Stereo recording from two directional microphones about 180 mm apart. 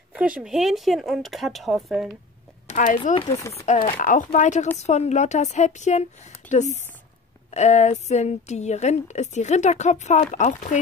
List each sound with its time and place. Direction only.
0.1 s speech: 5° right (ahead or behind)
2.7 s a woman's voice: 45° left (ahead or behind)